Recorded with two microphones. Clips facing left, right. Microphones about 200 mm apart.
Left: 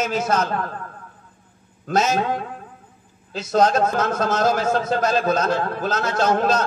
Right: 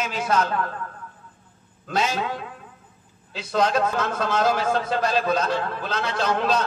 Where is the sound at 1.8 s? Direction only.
45° left (ahead or behind).